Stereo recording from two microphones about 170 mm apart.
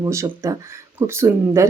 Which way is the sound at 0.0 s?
15° right (ahead or behind).